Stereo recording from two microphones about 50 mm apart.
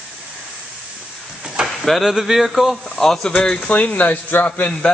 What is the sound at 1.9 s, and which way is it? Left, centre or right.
Speech, centre.